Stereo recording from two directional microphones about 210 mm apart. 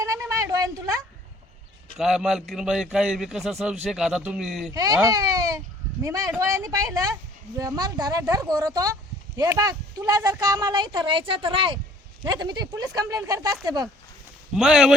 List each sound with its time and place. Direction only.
0.0 s a sound: 15° right (ahead or behind)
2.0 s a man's voice: centre (ahead or behind)
4.7 s speech: 15° right (ahead or behind)
14.5 s a man's voice: 5° right (ahead or behind)